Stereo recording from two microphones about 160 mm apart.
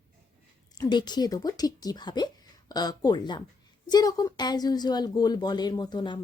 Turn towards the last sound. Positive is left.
turn(degrees=30)  # may be behind; listen again after turning